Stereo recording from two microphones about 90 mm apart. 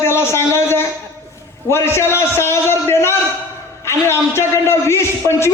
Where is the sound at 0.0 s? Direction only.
30° left (ahead or behind).